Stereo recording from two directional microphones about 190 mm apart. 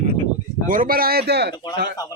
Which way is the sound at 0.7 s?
50° right (ahead or behind).